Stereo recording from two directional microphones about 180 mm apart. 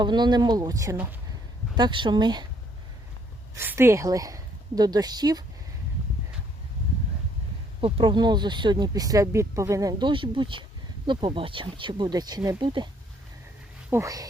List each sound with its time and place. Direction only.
0.0 s speech: 25° right (ahead or behind)
3.5 s a woman's voice: 15° right (ahead or behind)
7.8 s speech: 30° right (ahead or behind)
13.9 s speech: 20° right (ahead or behind)